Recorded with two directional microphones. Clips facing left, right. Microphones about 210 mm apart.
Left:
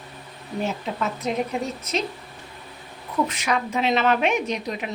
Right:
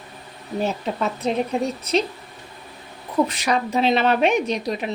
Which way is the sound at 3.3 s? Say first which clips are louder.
Right 3 dB; 35° right (ahead or behind).